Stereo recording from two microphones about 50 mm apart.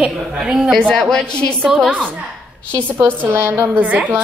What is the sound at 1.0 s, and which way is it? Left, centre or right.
Speech, centre.